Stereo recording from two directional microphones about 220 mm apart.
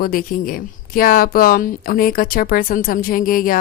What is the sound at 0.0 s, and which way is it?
A woman's voice, 40° left (ahead or behind).